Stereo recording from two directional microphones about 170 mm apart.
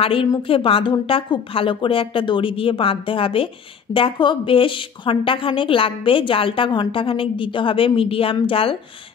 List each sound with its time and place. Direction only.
0.0 s a woman's voice: 30° left (ahead or behind)